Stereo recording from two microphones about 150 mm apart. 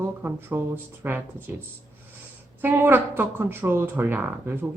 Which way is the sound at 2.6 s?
15° right (ahead or behind).